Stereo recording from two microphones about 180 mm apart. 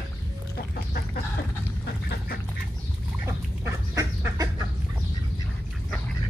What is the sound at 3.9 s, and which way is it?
Chicken, 20° right (ahead or behind).